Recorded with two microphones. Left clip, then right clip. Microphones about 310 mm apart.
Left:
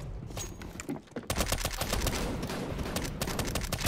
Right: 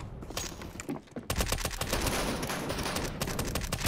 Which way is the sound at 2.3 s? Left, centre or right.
Right.